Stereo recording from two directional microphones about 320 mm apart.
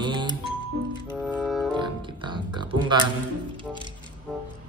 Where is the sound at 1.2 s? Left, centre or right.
Centre.